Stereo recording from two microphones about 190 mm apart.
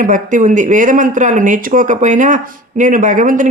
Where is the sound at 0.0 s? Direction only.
45° right (ahead or behind).